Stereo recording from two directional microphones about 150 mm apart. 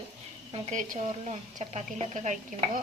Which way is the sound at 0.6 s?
55° right (ahead or behind).